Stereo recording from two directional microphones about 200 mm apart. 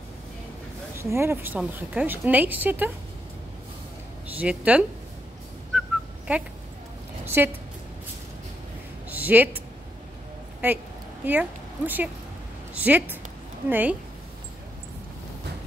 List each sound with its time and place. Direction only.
0.9 s a woman's voice: 10° right (ahead or behind)
4.3 s speech: 5° right (ahead or behind)
5.8 s dog: 5° right (ahead or behind)
7.2 s a woman's voice: 10° right (ahead or behind)
9.1 s a sound: 10° right (ahead or behind)
11.2 s a woman's voice: 10° right (ahead or behind)